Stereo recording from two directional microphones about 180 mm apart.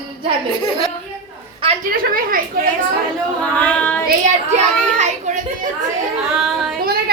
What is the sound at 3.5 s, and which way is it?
Child singing, 10° left (ahead or behind).